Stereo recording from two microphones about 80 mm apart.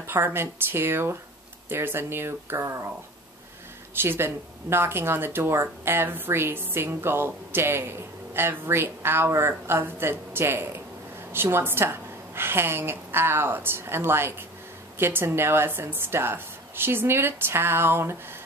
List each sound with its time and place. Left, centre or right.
0.0 s speech: right
3.9 s speech: right